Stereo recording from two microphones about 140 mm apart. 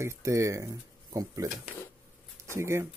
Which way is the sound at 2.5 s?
20° right (ahead or behind).